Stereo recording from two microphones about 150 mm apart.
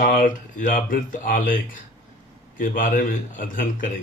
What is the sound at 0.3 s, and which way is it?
Speech, 65° left (ahead or behind).